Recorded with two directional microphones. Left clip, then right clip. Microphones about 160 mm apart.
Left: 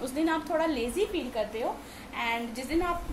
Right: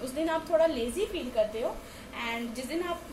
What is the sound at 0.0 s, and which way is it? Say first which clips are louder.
A woman's voice: left 1 dB; 20° left (ahead or behind).